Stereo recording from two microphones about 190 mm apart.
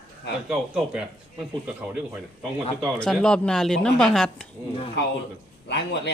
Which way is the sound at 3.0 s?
5° left (ahead or behind).